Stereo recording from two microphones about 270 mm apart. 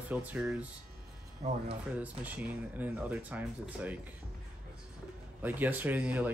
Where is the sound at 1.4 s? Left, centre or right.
Right.